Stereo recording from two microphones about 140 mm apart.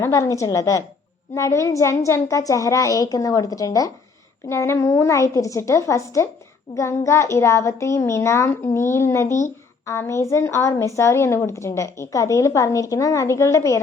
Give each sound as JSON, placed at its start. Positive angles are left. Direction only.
{"t": 0.0, "sound": "a woman's voice", "side_deg": 25}